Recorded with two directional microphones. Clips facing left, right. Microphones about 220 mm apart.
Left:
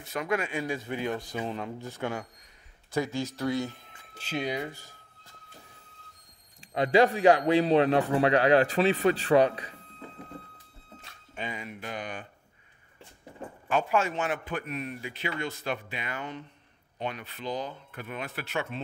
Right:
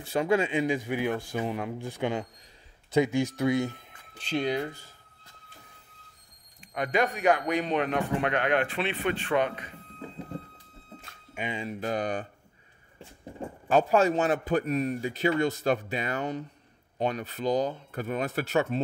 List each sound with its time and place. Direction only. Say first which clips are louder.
0.0 s speech: right 5 dB; 30° right (ahead or behind)
4.1 s speech: right 4 dB; 5° left (ahead or behind)
6.7 s a man's voice: left 5 dB; 30° left (ahead or behind)
11.5 s a man's voice: right 7 dB; 30° right (ahead or behind)
13.7 s a man's voice: right 5 dB; 35° right (ahead or behind)